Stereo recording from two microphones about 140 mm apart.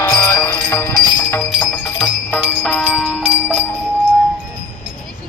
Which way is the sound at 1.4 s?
Centre (ahead or behind).